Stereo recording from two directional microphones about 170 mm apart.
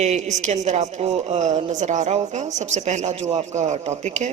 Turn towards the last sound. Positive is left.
turn(degrees=-45)  # may be behind; listen again after turning